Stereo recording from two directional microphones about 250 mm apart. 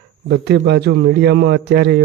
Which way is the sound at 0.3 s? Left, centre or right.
Right.